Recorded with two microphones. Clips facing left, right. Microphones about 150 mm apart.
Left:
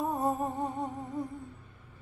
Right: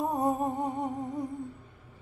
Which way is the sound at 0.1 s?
15° right (ahead or behind).